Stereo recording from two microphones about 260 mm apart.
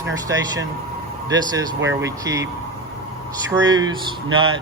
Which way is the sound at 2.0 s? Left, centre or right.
Centre.